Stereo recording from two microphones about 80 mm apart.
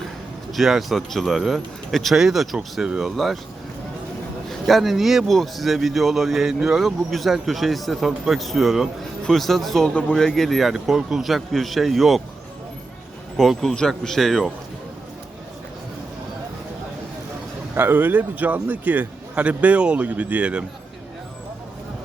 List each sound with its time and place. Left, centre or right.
0.5 s speech: centre
4.4 s speech: centre
9.9 s a man's voice: centre
10.2 s speech: centre
13.3 s speech: centre
17.7 s speech: right